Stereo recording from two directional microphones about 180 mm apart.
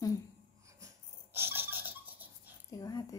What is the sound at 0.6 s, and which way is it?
Breathing, 15° right (ahead or behind).